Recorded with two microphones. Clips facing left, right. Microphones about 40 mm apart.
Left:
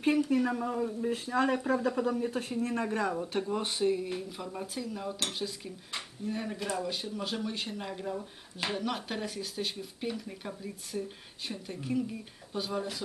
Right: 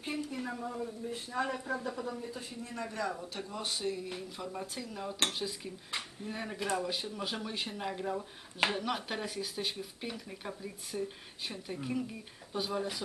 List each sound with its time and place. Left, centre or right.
0.0 s speech: left
1.0 s speech: left
2.0 s speech: left
2.8 s speech: left
3.2 s speech: left; by 13.0 s centre